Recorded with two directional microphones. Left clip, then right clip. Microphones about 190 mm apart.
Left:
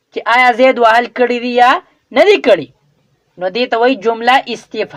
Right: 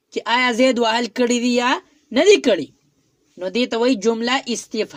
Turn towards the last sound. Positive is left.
turn(degrees=-25)  # may be behind; listen again after turning